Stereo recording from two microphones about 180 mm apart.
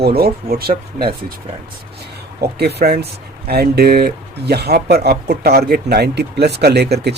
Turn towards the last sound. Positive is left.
turn(degrees=-65)  # may be behind; listen again after turning